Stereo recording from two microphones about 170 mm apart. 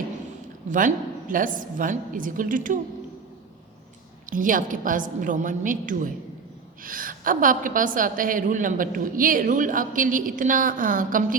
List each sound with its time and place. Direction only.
0.7 s a woman's voice: 50° right (ahead or behind)
4.3 s a woman's voice: 50° right (ahead or behind)